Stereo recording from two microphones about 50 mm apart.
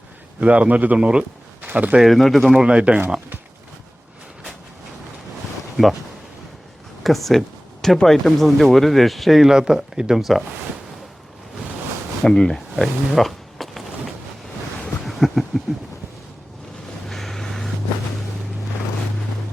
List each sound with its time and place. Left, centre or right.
0.3 s a man's voice: right
0.9 s speech: centre
1.6 s speech: right
2.0 s speech: centre
2.5 s speech: centre
5.7 s speech: centre
7.0 s speech: centre
9.5 s speech: centre
12.2 s speech: centre
12.8 s a sound: centre
15.0 s a sound: centre
17.1 s vehicle: centre